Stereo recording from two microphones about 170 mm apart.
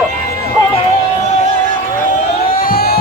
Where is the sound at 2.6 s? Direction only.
65° left (ahead or behind).